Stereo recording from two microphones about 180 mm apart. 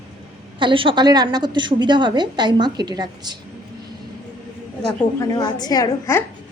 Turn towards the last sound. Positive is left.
turn(degrees=15)  # may be behind; listen again after turning